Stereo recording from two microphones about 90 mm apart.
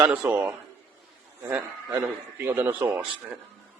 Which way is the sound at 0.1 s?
20° right (ahead or behind).